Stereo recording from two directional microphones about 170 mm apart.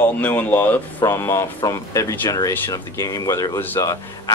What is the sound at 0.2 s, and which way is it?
Speech, 10° left (ahead or behind).